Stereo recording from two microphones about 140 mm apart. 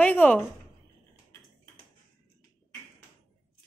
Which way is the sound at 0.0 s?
10° left (ahead or behind).